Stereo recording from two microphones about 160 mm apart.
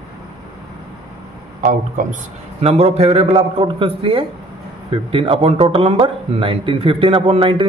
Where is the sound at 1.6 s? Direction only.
55° right (ahead or behind).